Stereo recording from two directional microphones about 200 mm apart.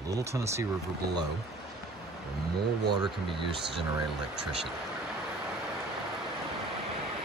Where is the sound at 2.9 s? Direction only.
25° right (ahead or behind).